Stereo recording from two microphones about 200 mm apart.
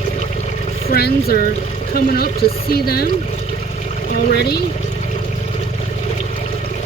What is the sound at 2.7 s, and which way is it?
Speech, 50° left (ahead or behind).